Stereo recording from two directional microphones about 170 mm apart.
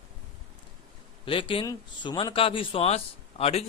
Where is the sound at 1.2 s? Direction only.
30° left (ahead or behind).